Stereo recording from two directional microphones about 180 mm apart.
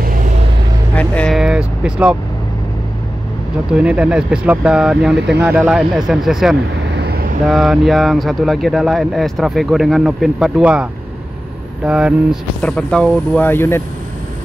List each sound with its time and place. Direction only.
0.0 s vehicle: 50° right (ahead or behind)
0.9 s vehicle: 5° left (ahead or behind)
3.7 s speech: 5° right (ahead or behind)
6.9 s vehicle: 65° right (ahead or behind)
7.4 s speech: centre (ahead or behind)